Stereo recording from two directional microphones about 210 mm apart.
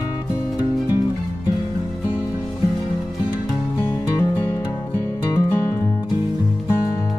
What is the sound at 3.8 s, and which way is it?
Music, 10° left (ahead or behind).